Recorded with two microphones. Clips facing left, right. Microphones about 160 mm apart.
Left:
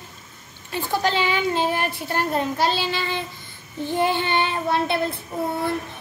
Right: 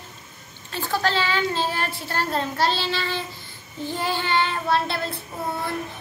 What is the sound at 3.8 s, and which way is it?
Child singing, 20° left (ahead or behind).